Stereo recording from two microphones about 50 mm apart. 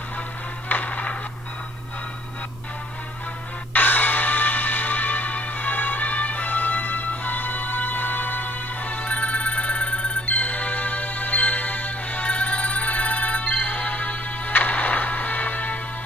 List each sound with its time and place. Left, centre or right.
0.7 s music: left
3.7 s music: left